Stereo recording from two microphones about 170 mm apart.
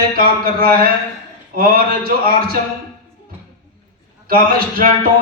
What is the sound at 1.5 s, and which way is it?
Speech, 55° right (ahead or behind).